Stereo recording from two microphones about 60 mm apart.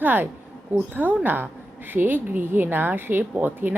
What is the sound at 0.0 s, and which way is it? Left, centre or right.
A woman's voice, right.